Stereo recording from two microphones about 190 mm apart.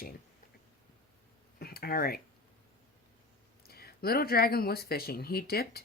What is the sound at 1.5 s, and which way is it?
Speech, 55° left (ahead or behind).